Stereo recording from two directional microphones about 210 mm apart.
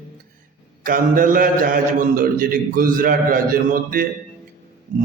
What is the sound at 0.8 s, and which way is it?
A man's voice, 40° right (ahead or behind).